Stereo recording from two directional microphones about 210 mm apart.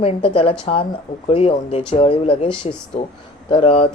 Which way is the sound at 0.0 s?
25° left (ahead or behind).